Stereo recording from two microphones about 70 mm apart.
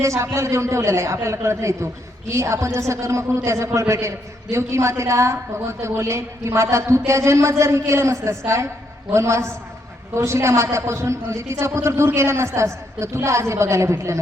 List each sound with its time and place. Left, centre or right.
0.0 s a man's voice: right